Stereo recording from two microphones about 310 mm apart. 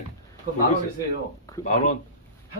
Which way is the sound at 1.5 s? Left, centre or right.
Centre.